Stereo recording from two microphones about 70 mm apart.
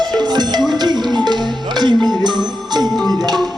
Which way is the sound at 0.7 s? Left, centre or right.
Right.